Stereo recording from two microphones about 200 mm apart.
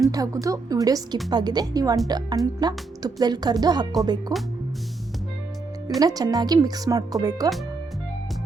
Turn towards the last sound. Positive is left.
turn(degrees=-20)  # may be behind; listen again after turning